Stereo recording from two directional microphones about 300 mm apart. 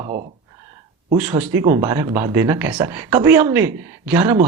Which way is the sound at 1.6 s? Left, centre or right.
Centre.